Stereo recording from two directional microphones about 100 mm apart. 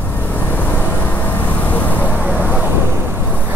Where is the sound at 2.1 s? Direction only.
15° right (ahead or behind).